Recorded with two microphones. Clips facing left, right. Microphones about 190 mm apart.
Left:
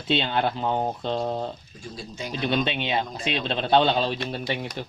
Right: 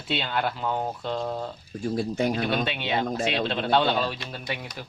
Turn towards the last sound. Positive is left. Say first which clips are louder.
# left 5 dB
turn(degrees=25)  # may be behind; listen again after turning